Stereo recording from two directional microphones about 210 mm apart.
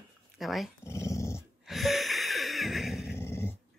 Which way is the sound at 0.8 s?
15° left (ahead or behind).